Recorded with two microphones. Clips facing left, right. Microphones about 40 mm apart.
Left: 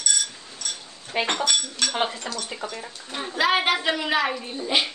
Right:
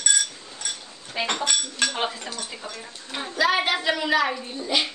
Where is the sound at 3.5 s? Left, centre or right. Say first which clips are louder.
Left 1 dB; centre.